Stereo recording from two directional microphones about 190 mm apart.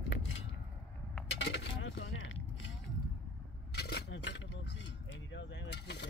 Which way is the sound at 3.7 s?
60° left (ahead or behind).